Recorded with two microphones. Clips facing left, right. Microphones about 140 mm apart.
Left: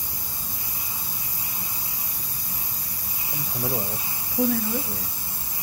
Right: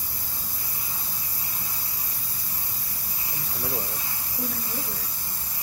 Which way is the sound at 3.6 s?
20° left (ahead or behind).